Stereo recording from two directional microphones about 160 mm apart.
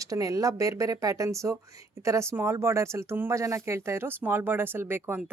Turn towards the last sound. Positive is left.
turn(degrees=-15)  # may be behind; listen again after turning